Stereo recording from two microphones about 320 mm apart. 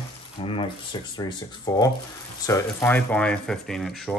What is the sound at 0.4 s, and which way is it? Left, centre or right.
Speech, centre.